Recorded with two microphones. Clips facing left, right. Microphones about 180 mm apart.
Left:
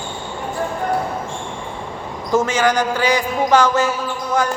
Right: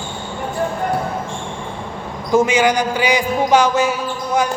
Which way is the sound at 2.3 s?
15° right (ahead or behind).